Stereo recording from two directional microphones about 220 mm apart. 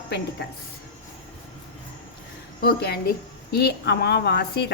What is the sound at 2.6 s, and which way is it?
A woman's voice, 45° left (ahead or behind).